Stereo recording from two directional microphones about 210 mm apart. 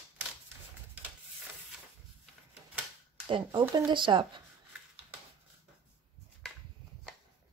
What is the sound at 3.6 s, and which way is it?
Speech, 20° right (ahead or behind).